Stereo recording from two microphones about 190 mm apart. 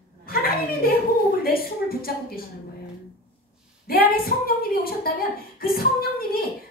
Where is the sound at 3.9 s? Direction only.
50° left (ahead or behind).